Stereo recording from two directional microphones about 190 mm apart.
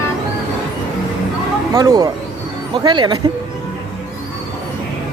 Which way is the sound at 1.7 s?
20° right (ahead or behind).